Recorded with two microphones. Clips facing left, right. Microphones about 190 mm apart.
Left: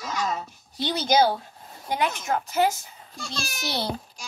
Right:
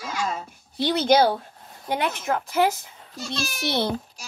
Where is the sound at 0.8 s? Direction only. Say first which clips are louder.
Right 3 dB; 60° right (ahead or behind).